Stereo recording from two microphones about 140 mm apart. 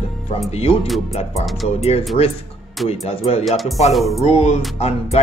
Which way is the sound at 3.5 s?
Centre (ahead or behind).